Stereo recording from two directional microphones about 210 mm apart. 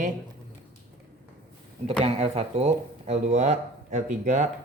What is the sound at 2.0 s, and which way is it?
Speech, 30° right (ahead or behind).